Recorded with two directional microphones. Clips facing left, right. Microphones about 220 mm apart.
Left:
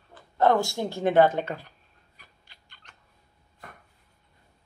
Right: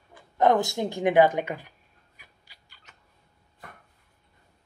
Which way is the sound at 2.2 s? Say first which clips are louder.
Left 1 dB; 10° right (ahead or behind).